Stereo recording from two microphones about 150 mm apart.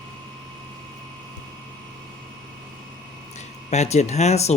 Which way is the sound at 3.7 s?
50° left (ahead or behind).